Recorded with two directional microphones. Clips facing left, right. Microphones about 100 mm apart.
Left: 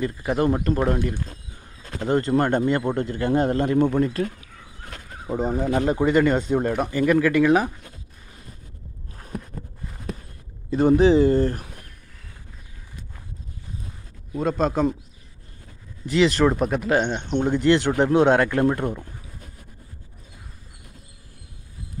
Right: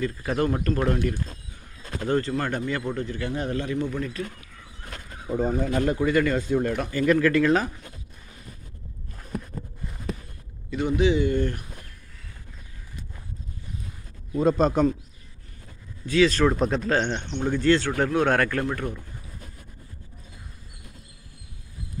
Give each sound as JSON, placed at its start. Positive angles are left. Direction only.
{"t": 0.0, "sound": "speech", "side_deg": 20}
{"t": 5.2, "sound": "speech", "side_deg": 20}
{"t": 10.7, "sound": "speech", "side_deg": 40}
{"t": 14.3, "sound": "a man's voice", "side_deg": 0}
{"t": 16.3, "sound": "speech", "side_deg": 10}